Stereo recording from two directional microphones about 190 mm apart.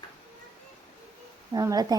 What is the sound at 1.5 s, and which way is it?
Speech, 20° right (ahead or behind).